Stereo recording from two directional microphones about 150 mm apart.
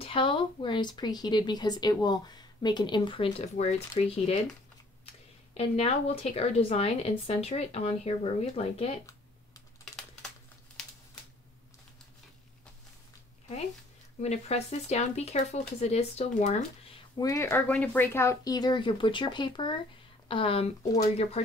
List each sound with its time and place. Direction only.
0.0 s speech: 35° left (ahead or behind)
10.8 s a sound: 5° left (ahead or behind)
14.2 s speech: 45° left (ahead or behind)
17.2 s speech: 20° left (ahead or behind)
17.5 s speech: 10° left (ahead or behind); by 21.4 s 45° left (ahead or behind)